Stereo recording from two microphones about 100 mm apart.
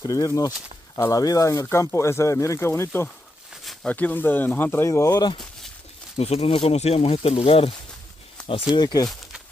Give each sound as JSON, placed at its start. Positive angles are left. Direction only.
{"t": 0.0, "sound": "speech", "side_deg": 35}
{"t": 6.1, "sound": "speech", "side_deg": 90}
{"t": 8.7, "sound": "speech", "side_deg": 40}